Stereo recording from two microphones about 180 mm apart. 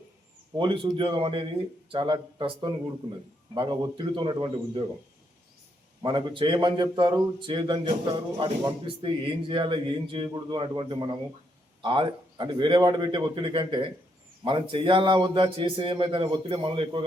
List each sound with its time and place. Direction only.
0.5 s a man's voice: 25° right (ahead or behind)
6.0 s a man's voice: 25° right (ahead or behind)